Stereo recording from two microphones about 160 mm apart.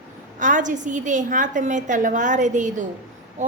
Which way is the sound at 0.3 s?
50° right (ahead or behind).